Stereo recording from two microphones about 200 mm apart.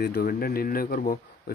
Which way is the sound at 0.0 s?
50° left (ahead or behind).